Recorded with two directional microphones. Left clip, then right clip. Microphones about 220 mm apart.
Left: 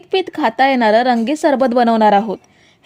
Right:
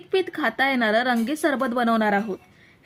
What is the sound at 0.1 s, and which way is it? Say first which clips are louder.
Speech: left 7 dB; 30° left (ahead or behind).